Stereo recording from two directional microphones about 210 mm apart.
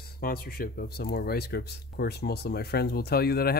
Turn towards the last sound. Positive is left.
turn(degrees=50)  # may be behind; listen again after turning